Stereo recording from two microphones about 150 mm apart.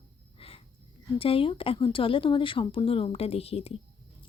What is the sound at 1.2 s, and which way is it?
A woman's voice, 40° left (ahead or behind).